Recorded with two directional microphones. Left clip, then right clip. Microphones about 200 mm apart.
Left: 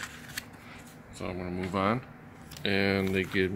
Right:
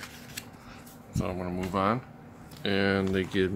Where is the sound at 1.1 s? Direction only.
10° right (ahead or behind).